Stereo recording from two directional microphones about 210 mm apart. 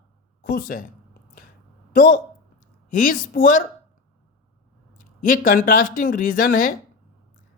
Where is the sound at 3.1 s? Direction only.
40° left (ahead or behind).